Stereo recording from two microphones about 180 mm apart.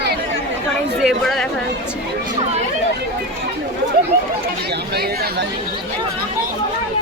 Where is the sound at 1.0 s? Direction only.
Centre (ahead or behind).